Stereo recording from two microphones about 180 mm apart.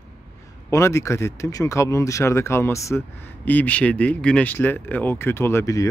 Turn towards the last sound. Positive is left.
turn(degrees=15)  # may be behind; listen again after turning